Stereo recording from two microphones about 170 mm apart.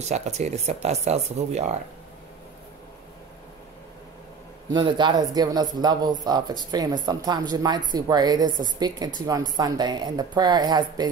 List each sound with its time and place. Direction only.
0.0 s speech: 40° right (ahead or behind)
4.6 s a man's voice: 25° right (ahead or behind)